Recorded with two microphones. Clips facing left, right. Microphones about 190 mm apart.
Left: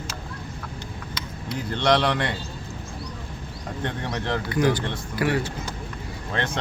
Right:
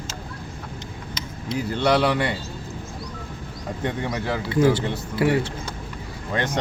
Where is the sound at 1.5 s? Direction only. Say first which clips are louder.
Right 1 dB; 10° right (ahead or behind).